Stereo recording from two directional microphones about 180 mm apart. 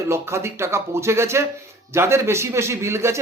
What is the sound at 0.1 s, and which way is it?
A man's voice, 15° right (ahead or behind).